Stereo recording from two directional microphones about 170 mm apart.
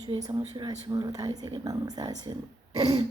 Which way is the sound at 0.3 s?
25° right (ahead or behind).